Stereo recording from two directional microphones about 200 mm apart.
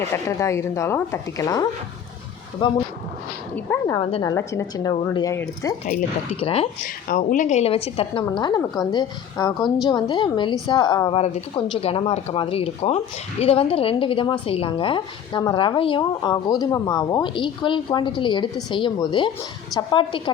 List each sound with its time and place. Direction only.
0.1 s a woman's voice: 15° left (ahead or behind)
3.5 s speech: 10° left (ahead or behind)
3.9 s a woman's voice: 25° left (ahead or behind)
6.4 s a woman's voice: 30° left (ahead or behind)
6.8 s a woman's voice: 40° left (ahead or behind); by 20.3 s 25° left (ahead or behind)